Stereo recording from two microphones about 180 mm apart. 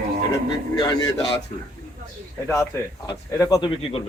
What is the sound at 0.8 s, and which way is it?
Speech, 20° left (ahead or behind).